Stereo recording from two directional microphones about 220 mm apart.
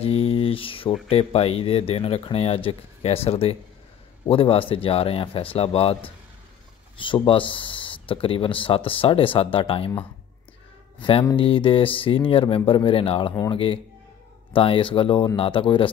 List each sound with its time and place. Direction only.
0.0 s mantra: 25° left (ahead or behind)
1.0 s speech: 25° left (ahead or behind)
7.0 s speech: 20° left (ahead or behind)
11.0 s speech: 25° left (ahead or behind)